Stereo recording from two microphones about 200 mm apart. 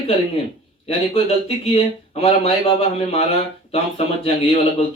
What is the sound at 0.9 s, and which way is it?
Speech, 30° left (ahead or behind).